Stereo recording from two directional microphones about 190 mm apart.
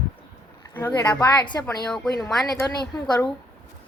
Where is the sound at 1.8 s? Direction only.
Centre (ahead or behind).